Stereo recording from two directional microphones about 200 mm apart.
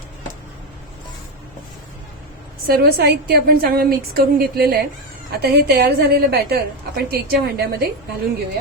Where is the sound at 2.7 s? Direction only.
50° right (ahead or behind).